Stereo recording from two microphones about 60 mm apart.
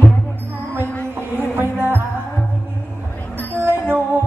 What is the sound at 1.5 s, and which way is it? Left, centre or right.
Music, right.